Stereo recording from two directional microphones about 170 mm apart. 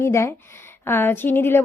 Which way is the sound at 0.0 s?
15° left (ahead or behind).